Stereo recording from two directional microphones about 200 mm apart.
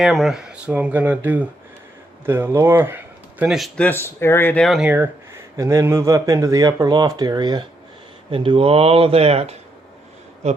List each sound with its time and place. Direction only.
0.0 s speech: centre (ahead or behind); by 9.6 s 30° right (ahead or behind)